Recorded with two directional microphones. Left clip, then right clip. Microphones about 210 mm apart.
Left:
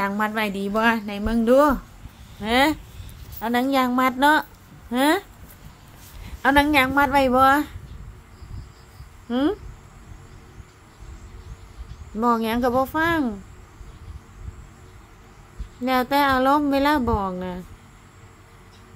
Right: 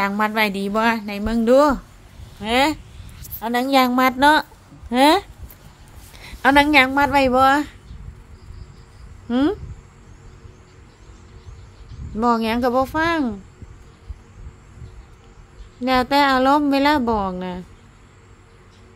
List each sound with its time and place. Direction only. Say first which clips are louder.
0.0 s a woman's voice: right 4 dB; 10° right (ahead or behind)
6.2 s a woman's voice: right 3 dB; 10° right (ahead or behind)
9.3 s a woman's voice: right 3 dB; 10° right (ahead or behind)
12.2 s a woman's voice: right 2 dB; 10° right (ahead or behind)
15.8 s a woman's voice: right 3 dB; 10° right (ahead or behind)